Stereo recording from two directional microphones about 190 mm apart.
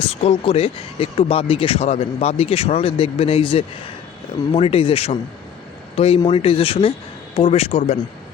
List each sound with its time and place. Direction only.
0.0 s speech: 30° left (ahead or behind)